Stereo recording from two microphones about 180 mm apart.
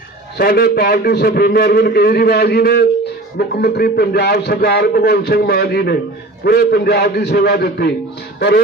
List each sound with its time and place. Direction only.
0.3 s a man's voice: 60° left (ahead or behind)